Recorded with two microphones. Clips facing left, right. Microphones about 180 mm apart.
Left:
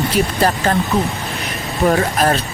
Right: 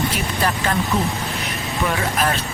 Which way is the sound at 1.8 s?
40° left (ahead or behind).